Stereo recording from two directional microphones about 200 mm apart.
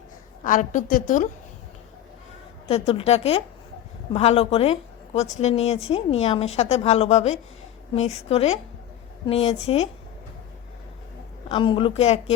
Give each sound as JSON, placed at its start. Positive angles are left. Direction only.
{"t": 0.4, "sound": "a woman's voice", "side_deg": 40}
{"t": 2.6, "sound": "a woman's voice", "side_deg": 30}
{"t": 11.4, "sound": "a woman's voice", "side_deg": 25}